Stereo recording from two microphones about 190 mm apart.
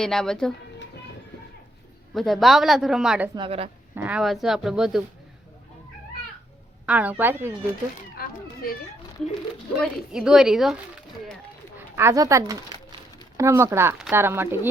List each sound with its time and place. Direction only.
0.0 s a woman's voice: centre (ahead or behind)
2.1 s a woman's voice: centre (ahead or behind)
3.3 s a woman's voice: 30° right (ahead or behind)
3.9 s a woman's voice: 10° right (ahead or behind)
6.8 s speech: 10° right (ahead or behind)
8.1 s children playing: 50° left (ahead or behind)
9.8 s a woman's voice: 5° right (ahead or behind)
11.8 s speech: 15° right (ahead or behind)